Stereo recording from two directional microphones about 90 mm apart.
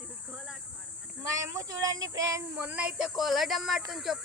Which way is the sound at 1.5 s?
40° right (ahead or behind).